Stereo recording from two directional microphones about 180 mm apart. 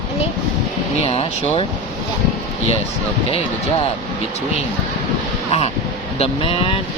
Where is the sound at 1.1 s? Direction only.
30° left (ahead or behind).